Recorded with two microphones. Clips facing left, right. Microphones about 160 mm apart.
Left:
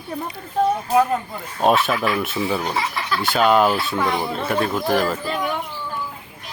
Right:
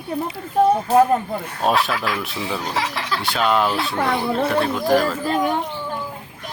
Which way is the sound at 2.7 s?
85° right.